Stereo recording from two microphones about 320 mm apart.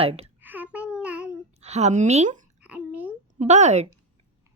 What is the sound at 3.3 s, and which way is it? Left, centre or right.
Speech, right.